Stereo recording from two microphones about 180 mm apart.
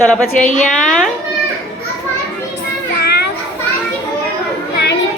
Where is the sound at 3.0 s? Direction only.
65° left (ahead or behind).